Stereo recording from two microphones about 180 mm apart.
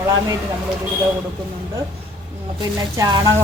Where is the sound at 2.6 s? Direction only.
20° right (ahead or behind).